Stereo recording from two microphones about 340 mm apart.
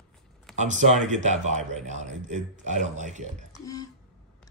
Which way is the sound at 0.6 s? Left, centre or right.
Right.